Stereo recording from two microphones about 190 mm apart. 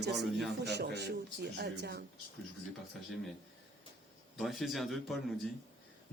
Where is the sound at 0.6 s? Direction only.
60° right (ahead or behind).